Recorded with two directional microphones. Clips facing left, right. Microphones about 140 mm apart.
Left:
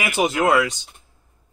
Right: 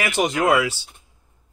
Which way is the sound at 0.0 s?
5° left (ahead or behind).